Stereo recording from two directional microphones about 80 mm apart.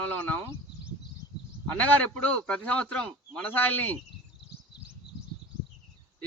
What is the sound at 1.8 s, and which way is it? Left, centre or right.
A man's voice, centre.